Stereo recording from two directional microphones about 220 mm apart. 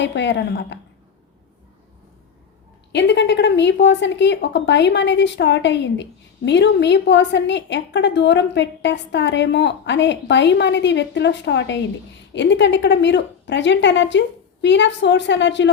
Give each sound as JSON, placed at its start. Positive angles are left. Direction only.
{"t": 0.0, "sound": "a woman's voice", "side_deg": 55}
{"t": 2.9, "sound": "a woman's voice", "side_deg": 50}